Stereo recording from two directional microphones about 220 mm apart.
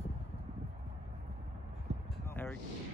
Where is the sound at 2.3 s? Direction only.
10° left (ahead or behind).